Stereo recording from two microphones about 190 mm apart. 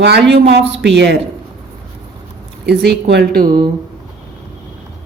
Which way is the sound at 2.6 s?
60° right (ahead or behind).